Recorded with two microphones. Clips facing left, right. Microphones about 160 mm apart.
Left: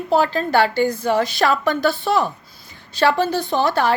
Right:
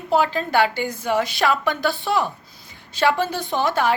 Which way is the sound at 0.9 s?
40° left (ahead or behind).